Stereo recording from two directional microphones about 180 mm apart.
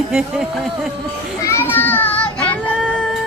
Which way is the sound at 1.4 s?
15° left (ahead or behind).